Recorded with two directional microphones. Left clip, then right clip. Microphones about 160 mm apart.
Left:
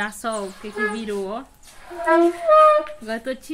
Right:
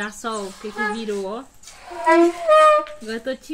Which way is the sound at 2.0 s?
45° right (ahead or behind).